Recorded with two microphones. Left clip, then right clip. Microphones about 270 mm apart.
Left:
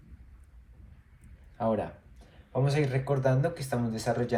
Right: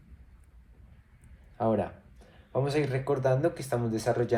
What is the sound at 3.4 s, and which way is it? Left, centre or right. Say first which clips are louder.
Speech: right 2 dB; right.